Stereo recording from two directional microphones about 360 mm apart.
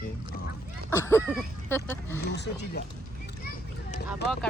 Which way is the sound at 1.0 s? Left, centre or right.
Centre.